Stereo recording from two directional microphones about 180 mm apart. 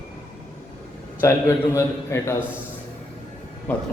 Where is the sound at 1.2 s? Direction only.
15° left (ahead or behind).